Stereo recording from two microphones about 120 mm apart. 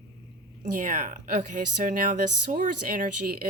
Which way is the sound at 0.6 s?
90° right.